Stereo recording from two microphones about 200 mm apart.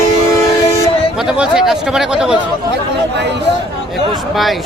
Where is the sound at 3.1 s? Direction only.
60° right (ahead or behind).